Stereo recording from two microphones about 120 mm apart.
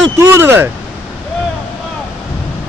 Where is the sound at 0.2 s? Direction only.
20° right (ahead or behind).